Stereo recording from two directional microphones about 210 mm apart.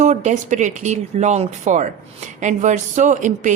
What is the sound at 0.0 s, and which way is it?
Speech, 35° right (ahead or behind).